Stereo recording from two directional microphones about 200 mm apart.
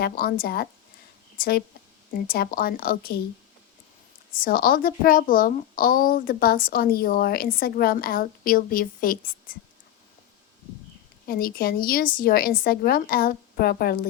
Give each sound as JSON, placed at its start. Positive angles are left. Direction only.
{"t": 0.0, "sound": "a woman's voice", "side_deg": 45}
{"t": 4.3, "sound": "a woman's voice", "side_deg": 45}
{"t": 11.3, "sound": "a woman's voice", "side_deg": 45}